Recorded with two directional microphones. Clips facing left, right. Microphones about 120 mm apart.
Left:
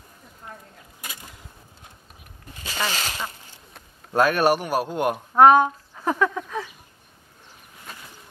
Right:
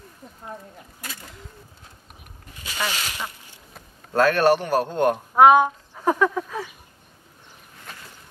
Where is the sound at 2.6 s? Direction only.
30° left (ahead or behind).